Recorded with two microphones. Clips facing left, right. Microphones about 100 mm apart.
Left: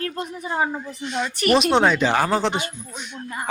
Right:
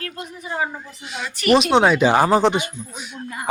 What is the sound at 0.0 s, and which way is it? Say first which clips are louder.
Speech: left 4 dB; 35° left (ahead or behind).